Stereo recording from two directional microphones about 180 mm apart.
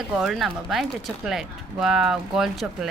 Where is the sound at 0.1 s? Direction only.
5° right (ahead or behind).